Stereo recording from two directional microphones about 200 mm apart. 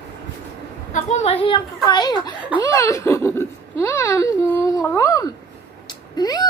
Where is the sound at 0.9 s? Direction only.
35° left (ahead or behind); by 5.3 s 15° left (ahead or behind).